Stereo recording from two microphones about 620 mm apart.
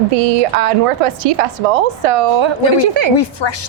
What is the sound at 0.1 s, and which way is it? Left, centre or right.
A woman's voice, right.